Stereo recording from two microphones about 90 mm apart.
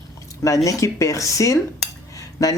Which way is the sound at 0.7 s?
35° left (ahead or behind).